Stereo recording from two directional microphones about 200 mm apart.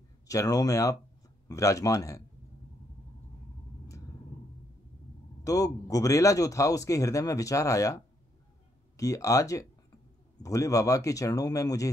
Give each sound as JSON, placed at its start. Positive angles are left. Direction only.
{"t": 0.3, "sound": "a man's voice", "side_deg": 15}
{"t": 5.4, "sound": "a man's voice", "side_deg": 15}